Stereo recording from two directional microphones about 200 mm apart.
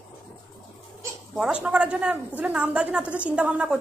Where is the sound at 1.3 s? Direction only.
5° right (ahead or behind).